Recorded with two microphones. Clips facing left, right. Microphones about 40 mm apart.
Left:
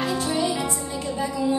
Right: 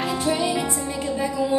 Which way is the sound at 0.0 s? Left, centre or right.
Right.